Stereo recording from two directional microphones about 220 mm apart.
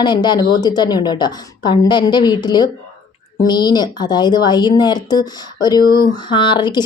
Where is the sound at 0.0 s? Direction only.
20° left (ahead or behind).